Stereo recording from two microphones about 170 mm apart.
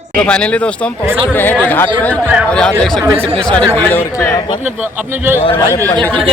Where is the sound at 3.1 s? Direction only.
35° right (ahead or behind).